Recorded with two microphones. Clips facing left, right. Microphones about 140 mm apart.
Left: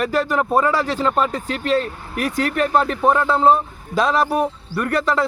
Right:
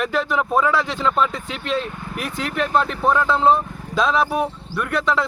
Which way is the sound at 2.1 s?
5° left (ahead or behind).